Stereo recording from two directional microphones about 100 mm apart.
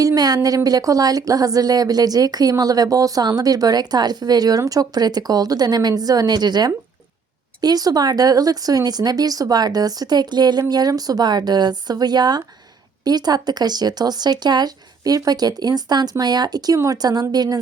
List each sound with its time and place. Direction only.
0.0 s speech: 40° right (ahead or behind)